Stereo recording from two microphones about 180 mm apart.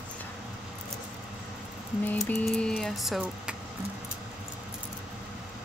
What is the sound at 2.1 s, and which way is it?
Speech, 10° left (ahead or behind).